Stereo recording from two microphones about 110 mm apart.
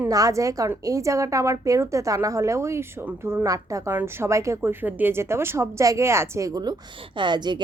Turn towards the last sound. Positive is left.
turn(degrees=-45)  # may be behind; listen again after turning